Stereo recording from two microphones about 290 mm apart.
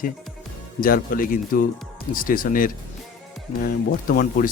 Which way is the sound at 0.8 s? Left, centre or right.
Left.